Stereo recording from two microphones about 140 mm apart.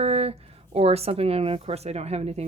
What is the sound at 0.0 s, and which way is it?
Speech, 45° right (ahead or behind).